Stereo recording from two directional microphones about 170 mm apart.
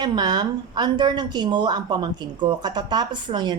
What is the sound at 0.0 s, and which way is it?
A woman's voice, 25° right (ahead or behind).